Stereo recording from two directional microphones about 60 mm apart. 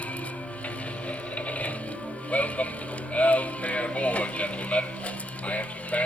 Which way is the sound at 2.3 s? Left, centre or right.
Left.